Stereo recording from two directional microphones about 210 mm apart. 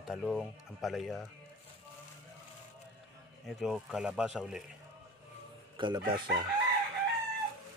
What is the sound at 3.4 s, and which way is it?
Speech, centre (ahead or behind).